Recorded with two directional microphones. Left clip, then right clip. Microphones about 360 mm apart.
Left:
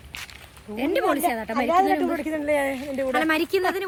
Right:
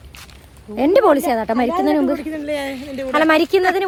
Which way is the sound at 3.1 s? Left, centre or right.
Centre.